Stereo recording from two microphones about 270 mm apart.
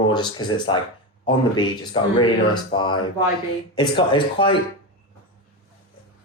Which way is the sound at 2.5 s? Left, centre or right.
Centre.